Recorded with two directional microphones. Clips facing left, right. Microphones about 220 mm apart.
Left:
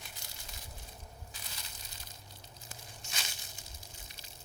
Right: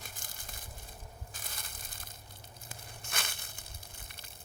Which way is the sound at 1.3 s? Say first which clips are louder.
Right 2 dB; 50° right (ahead or behind).